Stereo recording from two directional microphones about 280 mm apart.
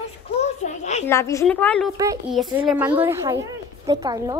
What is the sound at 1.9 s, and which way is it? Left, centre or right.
A woman's voice, centre.